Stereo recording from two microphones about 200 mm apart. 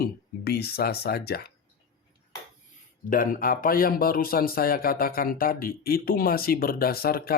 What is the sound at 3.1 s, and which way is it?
A man's voice, 45° left (ahead or behind).